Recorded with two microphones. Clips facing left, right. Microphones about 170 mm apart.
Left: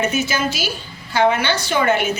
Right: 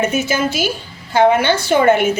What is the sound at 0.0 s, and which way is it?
A woman's voice, 50° right (ahead or behind).